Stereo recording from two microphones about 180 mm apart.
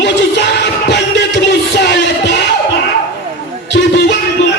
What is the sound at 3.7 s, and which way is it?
Music, 75° left (ahead or behind).